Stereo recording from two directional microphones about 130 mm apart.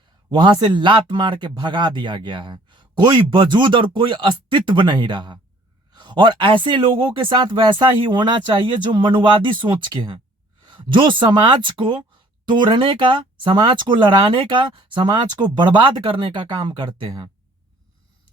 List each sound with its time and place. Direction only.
0.3 s speech: 35° right (ahead or behind)